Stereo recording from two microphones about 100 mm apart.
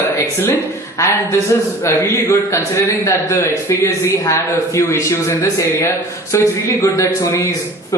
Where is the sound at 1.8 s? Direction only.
25° left (ahead or behind).